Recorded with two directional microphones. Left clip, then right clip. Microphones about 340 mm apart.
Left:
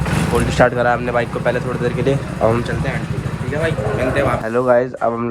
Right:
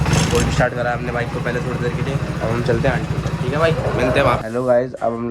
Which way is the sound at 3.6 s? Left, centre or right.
Centre.